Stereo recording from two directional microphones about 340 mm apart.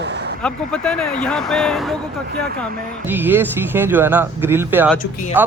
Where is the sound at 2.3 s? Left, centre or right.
Right.